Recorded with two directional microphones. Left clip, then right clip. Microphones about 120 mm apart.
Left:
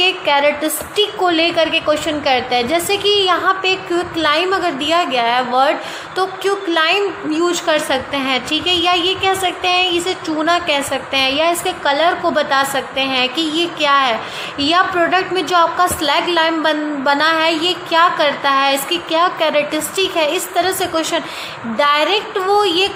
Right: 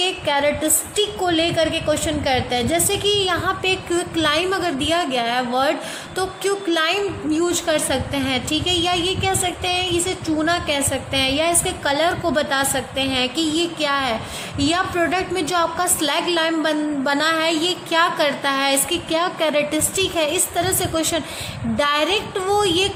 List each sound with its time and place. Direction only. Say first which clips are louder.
0.0 s a woman's voice: left 6 dB; 45° right (ahead or behind)